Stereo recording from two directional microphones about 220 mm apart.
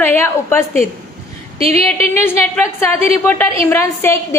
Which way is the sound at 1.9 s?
30° right (ahead or behind).